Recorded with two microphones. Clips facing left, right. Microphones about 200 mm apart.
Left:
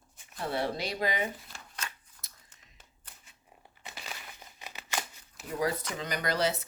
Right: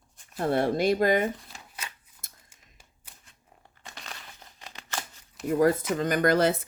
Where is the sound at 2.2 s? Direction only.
50° right (ahead or behind).